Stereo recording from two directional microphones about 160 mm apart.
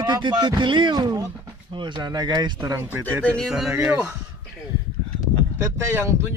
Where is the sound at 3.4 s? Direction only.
5° right (ahead or behind).